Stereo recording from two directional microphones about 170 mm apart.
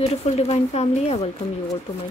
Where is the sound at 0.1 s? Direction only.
40° left (ahead or behind).